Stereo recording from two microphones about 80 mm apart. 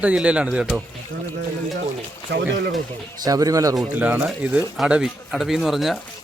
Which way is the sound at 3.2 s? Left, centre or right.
Right.